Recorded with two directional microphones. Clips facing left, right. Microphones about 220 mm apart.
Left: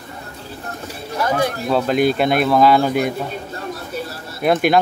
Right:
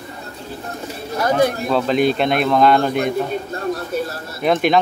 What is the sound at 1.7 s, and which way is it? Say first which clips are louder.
Speech: even; 5° left (ahead or behind).